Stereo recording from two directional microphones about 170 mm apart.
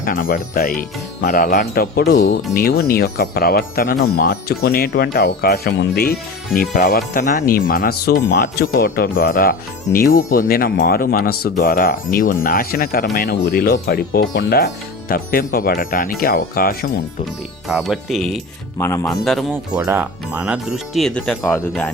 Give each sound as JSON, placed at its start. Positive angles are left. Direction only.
{"t": 0.0, "sound": "speech", "side_deg": 55}
{"t": 17.7, "sound": "speech", "side_deg": -5}
{"t": 18.8, "sound": "a man's voice", "side_deg": 20}
{"t": 19.2, "sound": "speech", "side_deg": 0}